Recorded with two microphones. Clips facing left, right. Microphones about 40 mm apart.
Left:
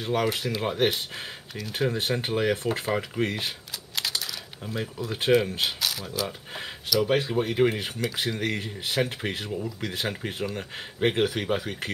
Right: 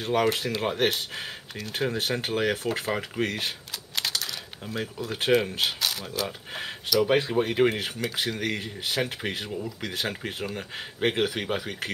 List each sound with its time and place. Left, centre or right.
0.0 s speech: centre
1.6 s speech: centre
2.5 s speech: right
2.9 s speech: centre
3.4 s camera: centre
4.6 s speech: centre